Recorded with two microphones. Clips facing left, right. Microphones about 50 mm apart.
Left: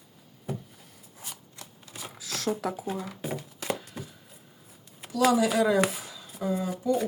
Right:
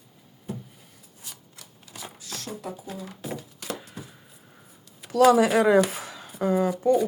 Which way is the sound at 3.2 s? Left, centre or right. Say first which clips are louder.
Left 1 dB; left.